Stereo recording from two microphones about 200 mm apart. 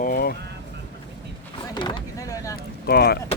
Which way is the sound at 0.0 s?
50° left (ahead or behind).